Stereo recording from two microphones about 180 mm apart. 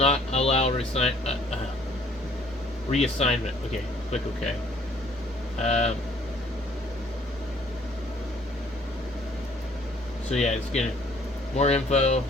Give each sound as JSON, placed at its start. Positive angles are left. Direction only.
{"t": 0.0, "sound": "speech", "side_deg": 35}
{"t": 2.9, "sound": "speech", "side_deg": 35}
{"t": 5.6, "sound": "speech", "side_deg": 40}
{"t": 10.3, "sound": "speech", "side_deg": 40}